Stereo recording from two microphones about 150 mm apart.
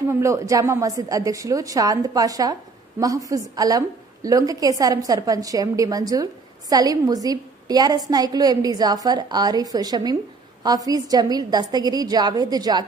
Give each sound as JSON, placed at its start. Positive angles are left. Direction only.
{"t": 0.1, "sound": "a woman's voice", "side_deg": -20}